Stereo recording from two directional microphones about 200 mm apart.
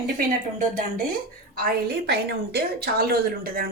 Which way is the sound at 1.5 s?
50° right (ahead or behind).